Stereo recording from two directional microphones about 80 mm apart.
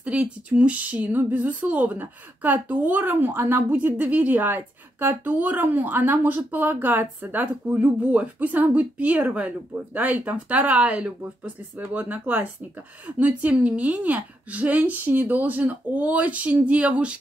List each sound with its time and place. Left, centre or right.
0.0 s speech: centre